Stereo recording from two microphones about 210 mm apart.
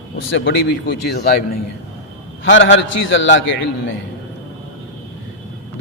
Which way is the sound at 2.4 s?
60° left (ahead or behind).